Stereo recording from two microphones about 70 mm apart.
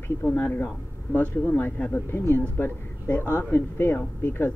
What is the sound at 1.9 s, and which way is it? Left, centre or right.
Speech, left.